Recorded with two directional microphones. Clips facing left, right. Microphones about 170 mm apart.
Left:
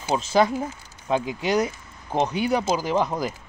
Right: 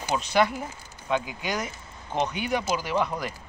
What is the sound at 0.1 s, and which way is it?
Speech, 30° left (ahead or behind).